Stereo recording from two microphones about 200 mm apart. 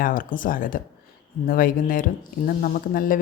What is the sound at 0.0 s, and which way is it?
Speech, 45° left (ahead or behind).